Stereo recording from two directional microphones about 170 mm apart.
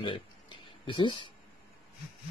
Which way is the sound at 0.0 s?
30° left (ahead or behind).